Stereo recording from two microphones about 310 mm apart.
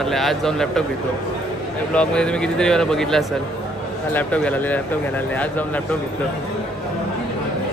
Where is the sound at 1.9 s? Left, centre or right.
Centre.